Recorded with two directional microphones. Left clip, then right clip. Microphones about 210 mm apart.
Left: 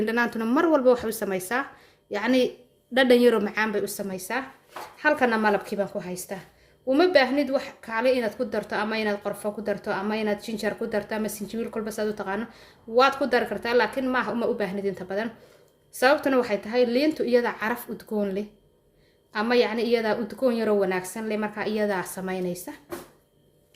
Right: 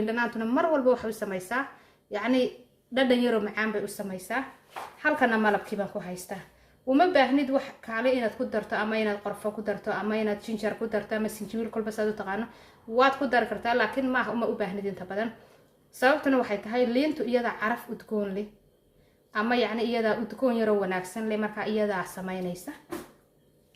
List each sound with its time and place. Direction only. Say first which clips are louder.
0.0 s a woman's voice: left 4 dB; 45° left (ahead or behind)